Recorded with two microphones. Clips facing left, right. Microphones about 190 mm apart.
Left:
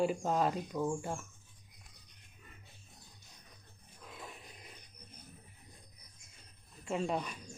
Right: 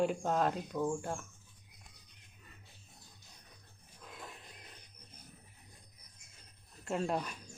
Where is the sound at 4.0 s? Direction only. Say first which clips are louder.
Left 1 dB; centre (ahead or behind).